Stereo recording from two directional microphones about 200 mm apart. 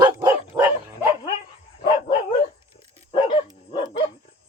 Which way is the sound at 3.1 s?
25° left (ahead or behind).